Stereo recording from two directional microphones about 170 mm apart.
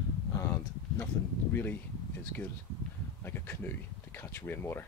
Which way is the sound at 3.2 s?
10° left (ahead or behind).